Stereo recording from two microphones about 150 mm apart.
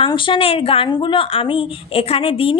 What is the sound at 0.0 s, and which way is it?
Speech, 35° left (ahead or behind).